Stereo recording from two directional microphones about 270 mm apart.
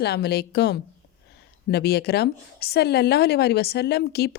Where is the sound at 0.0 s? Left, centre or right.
Left.